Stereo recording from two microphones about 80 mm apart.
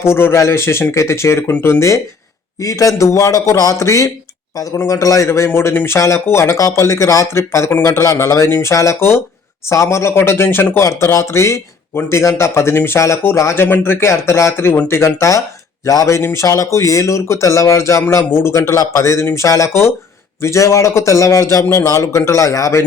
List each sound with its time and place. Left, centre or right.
0.0 s a man's voice: left
5.5 s speech: left
10.8 s speech: left